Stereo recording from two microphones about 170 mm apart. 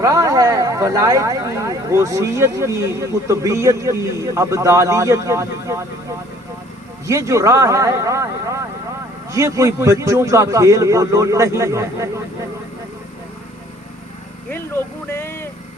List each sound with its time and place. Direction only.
0.0 s speech: 20° right (ahead or behind)
14.5 s speech: 15° left (ahead or behind)